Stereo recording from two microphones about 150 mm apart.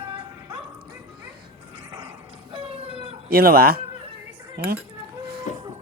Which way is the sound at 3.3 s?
90° right.